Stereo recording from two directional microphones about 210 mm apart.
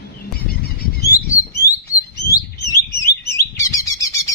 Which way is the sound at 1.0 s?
50° left (ahead or behind).